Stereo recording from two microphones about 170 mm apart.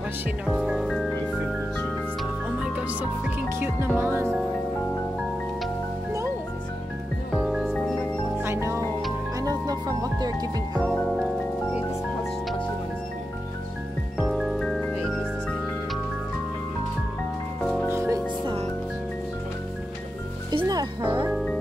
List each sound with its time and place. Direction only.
0.5 s music: centre (ahead or behind)
2.6 s music: 10° right (ahead or behind)
7.3 s music: 5° right (ahead or behind)
8.4 s music: 15° right (ahead or behind)
10.8 s music: centre (ahead or behind)
14.1 s music: centre (ahead or behind)
17.8 s music: 15° right (ahead or behind)
20.5 s music: 25° right (ahead or behind)